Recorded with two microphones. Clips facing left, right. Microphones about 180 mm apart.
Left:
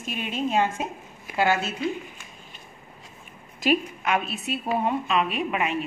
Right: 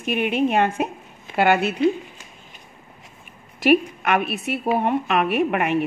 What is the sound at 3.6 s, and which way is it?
A woman's voice, 65° right (ahead or behind).